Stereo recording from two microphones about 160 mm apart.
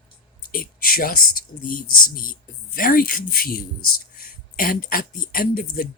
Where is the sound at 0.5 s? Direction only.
65° left (ahead or behind).